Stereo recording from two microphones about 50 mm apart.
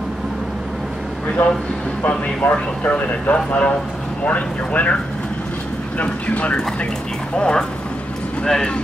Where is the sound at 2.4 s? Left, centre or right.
Left.